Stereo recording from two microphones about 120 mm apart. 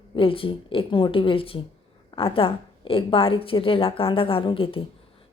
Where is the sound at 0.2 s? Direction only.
50° left (ahead or behind).